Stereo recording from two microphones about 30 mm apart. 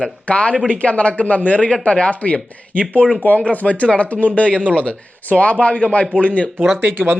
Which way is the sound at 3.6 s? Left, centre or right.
Left.